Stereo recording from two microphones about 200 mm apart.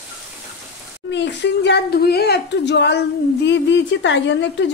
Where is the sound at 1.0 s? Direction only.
60° left (ahead or behind).